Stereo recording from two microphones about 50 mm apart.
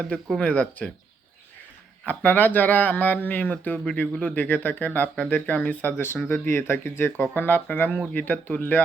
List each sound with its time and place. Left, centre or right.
0.3 s speech: left
2.0 s speech: left
4.4 s speech: left
5.6 s speech: left